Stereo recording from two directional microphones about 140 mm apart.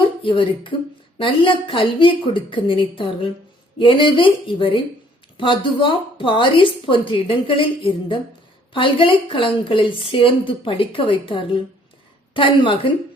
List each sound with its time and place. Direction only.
0.2 s a woman's voice: 35° left (ahead or behind)